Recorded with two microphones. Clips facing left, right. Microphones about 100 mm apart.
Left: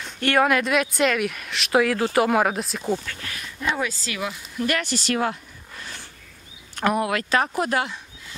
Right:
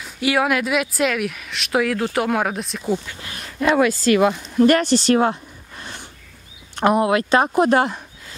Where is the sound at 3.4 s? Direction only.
70° right (ahead or behind); by 5.3 s 30° right (ahead or behind).